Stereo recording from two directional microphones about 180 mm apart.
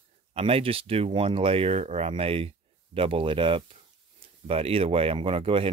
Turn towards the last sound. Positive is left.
turn(degrees=-30)  # may be behind; listen again after turning